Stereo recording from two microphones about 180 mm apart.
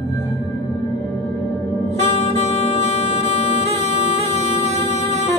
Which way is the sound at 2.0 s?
35° left (ahead or behind).